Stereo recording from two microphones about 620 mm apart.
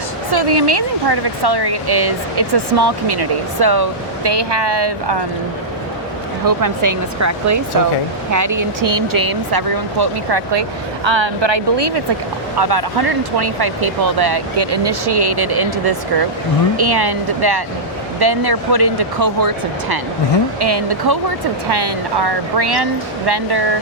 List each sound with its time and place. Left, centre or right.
0.3 s speech: right
6.4 s speech: right